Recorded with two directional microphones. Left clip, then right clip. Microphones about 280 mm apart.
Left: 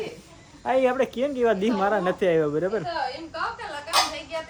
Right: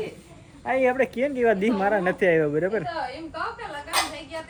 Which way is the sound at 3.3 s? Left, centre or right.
Centre.